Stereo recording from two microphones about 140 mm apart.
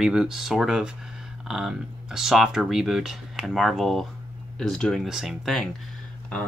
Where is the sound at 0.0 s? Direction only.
5° right (ahead or behind).